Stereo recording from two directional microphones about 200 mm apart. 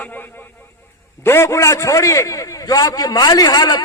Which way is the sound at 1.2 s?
10° left (ahead or behind).